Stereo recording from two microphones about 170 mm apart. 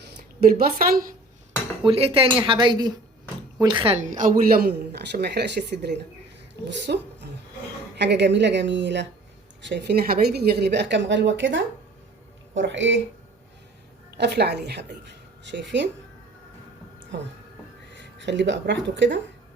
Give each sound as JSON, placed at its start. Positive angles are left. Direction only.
{"t": 0.0, "sound": "a woman's voice", "side_deg": -65}
{"t": 1.9, "sound": "speech", "side_deg": -35}
{"t": 3.9, "sound": "speech", "side_deg": -50}
{"t": 6.7, "sound": "speech", "side_deg": -90}
{"t": 14.2, "sound": "a woman's voice", "side_deg": -75}
{"t": 17.1, "sound": "speech", "side_deg": -90}